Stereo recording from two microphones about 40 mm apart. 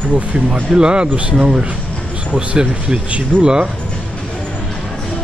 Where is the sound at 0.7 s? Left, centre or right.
Right.